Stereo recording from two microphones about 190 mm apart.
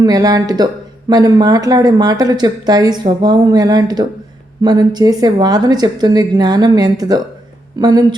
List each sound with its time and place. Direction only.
0.0 s speech: 20° right (ahead or behind)